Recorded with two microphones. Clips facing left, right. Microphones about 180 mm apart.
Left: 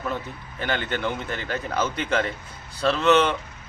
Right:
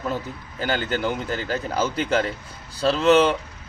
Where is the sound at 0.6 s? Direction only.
35° right (ahead or behind).